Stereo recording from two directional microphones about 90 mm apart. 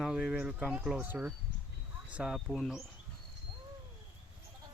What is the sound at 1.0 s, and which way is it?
Speech, 20° right (ahead or behind).